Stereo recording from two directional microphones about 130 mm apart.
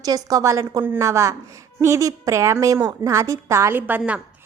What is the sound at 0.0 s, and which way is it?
A woman's voice, 30° right (ahead or behind).